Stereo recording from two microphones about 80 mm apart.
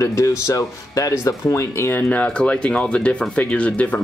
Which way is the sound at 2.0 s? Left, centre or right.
Centre.